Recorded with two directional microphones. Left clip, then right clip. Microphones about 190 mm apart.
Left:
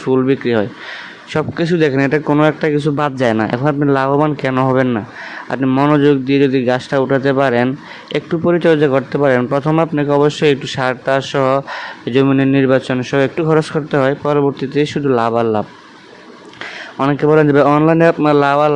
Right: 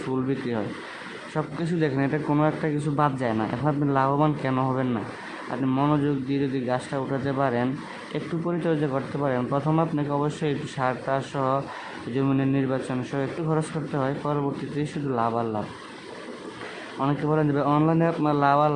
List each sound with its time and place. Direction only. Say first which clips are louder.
0.1 s a man's voice: left 15 dB; 35° left (ahead or behind)
17.0 s a man's voice: left 13 dB; 40° left (ahead or behind)